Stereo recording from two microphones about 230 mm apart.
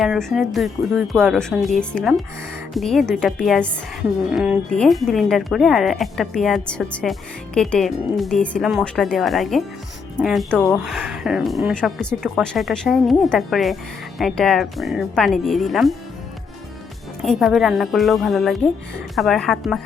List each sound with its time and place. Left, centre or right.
0.0 s speech: centre
17.2 s speech: centre